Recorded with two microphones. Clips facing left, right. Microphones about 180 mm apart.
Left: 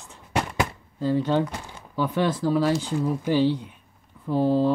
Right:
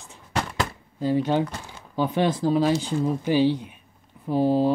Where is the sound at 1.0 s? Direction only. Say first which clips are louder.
Even; 15° right (ahead or behind).